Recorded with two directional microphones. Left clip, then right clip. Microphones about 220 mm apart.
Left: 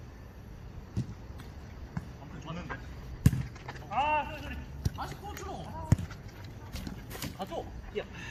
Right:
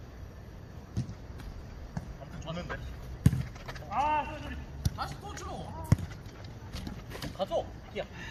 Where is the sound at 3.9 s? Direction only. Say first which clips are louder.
Even; 35° left (ahead or behind).